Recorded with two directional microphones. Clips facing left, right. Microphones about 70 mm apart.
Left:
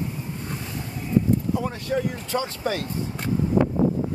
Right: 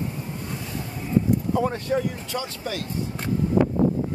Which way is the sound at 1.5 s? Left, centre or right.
Right.